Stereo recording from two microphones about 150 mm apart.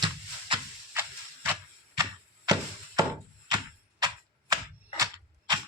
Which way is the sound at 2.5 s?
25° right (ahead or behind).